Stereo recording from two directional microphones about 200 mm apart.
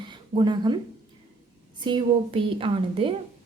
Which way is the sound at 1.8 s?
25° right (ahead or behind).